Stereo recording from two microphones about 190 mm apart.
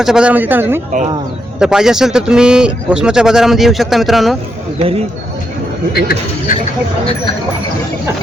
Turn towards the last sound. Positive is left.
turn(degrees=55)  # may be behind; listen again after turning